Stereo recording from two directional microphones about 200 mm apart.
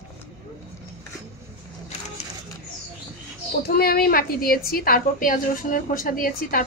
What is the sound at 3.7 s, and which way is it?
A woman's voice, 50° left (ahead or behind).